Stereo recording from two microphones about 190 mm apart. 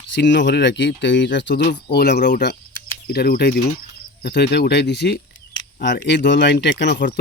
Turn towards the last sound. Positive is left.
turn(degrees=50)  # may be behind; listen again after turning